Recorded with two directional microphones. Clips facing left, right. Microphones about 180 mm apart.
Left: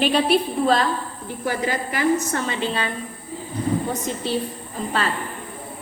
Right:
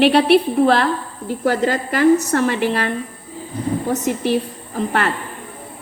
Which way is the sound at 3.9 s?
70° right (ahead or behind).